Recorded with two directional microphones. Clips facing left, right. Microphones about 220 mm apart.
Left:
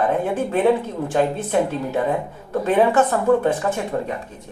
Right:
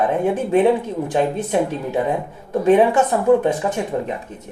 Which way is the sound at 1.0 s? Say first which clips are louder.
Left 1 dB; 15° right (ahead or behind).